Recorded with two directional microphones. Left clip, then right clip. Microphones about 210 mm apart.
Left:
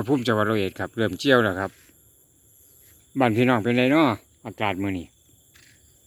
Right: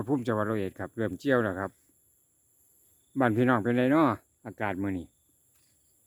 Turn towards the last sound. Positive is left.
turn(degrees=-15)  # may be behind; listen again after turning